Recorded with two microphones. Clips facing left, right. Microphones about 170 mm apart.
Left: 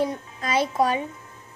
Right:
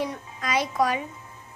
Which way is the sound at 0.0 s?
30° left (ahead or behind).